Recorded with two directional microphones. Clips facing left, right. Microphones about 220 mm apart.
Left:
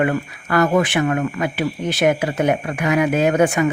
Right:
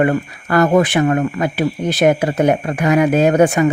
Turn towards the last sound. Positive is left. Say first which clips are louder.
# right 4 dB
turn(degrees=-35)  # may be behind; listen again after turning